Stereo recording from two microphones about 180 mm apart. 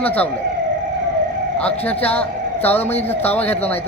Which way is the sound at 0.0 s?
10° left (ahead or behind).